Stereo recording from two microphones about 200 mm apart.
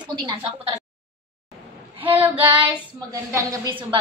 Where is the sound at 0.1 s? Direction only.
20° right (ahead or behind).